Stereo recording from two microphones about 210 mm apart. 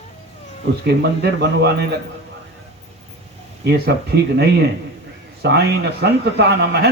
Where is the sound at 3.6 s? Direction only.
50° right (ahead or behind).